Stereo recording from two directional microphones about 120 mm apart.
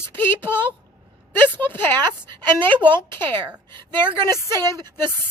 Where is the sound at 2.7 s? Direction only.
40° right (ahead or behind).